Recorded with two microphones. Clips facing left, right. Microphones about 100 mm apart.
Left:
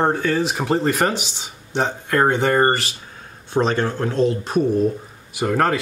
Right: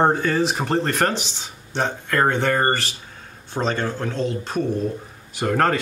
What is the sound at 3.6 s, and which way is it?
Speech, 40° left (ahead or behind).